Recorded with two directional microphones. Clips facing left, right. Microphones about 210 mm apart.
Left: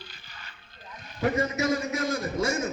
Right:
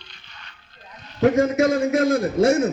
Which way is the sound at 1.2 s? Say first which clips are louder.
Right 9 dB; 50° right (ahead or behind).